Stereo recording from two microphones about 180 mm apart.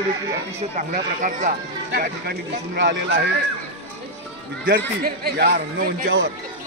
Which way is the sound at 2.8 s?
75° right (ahead or behind).